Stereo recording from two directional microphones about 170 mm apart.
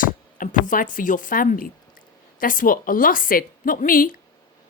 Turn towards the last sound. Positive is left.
turn(degrees=55)  # may be behind; listen again after turning